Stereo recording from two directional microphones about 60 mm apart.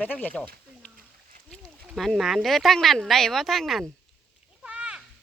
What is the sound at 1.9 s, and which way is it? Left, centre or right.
Speech, centre.